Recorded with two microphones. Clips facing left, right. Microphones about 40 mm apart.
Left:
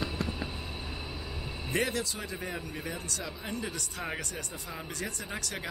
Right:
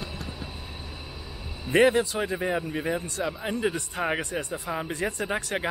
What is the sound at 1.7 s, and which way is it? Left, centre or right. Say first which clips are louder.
A man's voice: right 11 dB; right.